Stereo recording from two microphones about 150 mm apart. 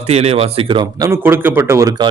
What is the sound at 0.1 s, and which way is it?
Speech, 45° right (ahead or behind).